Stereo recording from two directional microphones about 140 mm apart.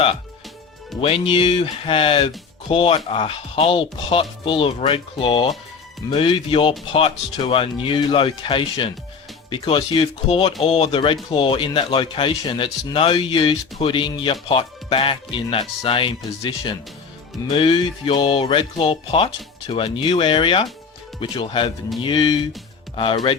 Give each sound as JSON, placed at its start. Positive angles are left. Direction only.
{"t": 1.0, "sound": "speech", "side_deg": 40}